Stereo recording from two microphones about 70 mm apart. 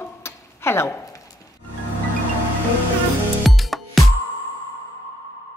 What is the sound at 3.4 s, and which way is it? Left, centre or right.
Music, centre.